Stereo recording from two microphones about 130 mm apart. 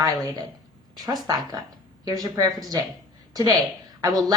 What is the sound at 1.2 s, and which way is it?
Speech, 30° right (ahead or behind).